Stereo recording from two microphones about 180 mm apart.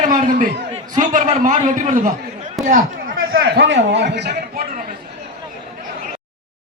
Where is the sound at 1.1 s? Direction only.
45° right (ahead or behind); by 4.4 s 65° right (ahead or behind).